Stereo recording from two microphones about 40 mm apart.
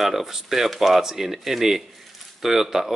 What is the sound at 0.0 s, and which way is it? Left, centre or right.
Speech, centre.